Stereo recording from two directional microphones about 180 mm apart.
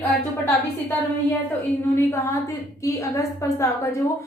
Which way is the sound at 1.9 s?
15° left (ahead or behind).